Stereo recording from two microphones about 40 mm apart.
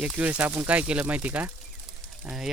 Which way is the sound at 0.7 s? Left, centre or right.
Right.